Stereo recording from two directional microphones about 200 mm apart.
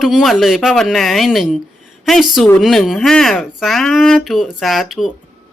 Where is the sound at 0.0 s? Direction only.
Centre (ahead or behind).